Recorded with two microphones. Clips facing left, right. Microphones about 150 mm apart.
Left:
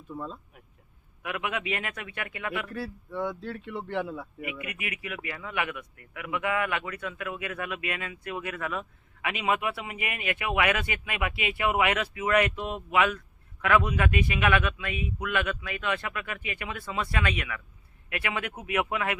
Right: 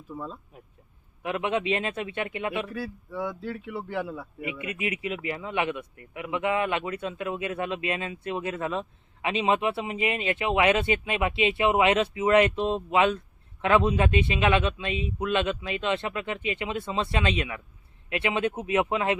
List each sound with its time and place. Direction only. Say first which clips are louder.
0.1 s a man's voice: even; centre (ahead or behind)
1.2 s speech: right 5 dB; 25° right (ahead or behind)
2.6 s a man's voice: right 1 dB; centre (ahead or behind)
4.4 s speech: right 4 dB; 25° right (ahead or behind)